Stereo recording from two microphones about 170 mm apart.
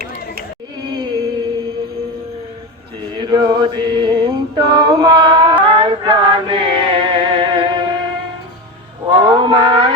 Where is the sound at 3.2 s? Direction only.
25° right (ahead or behind).